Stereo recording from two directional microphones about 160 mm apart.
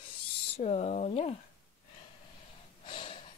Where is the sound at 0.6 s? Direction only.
45° left (ahead or behind).